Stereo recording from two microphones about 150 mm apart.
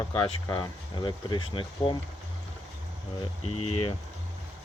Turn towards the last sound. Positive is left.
turn(degrees=40)  # may be behind; listen again after turning